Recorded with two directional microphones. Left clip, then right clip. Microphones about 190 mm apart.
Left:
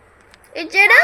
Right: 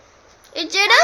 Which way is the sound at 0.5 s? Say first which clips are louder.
Right 1 dB; 15° right (ahead or behind).